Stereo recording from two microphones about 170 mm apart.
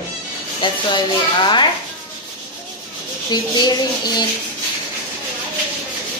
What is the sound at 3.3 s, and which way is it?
Speech, 25° left (ahead or behind).